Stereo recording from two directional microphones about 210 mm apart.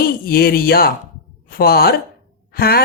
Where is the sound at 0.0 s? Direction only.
45° left (ahead or behind).